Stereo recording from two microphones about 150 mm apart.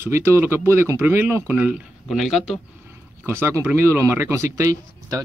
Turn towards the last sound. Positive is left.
turn(degrees=-20)  # may be behind; listen again after turning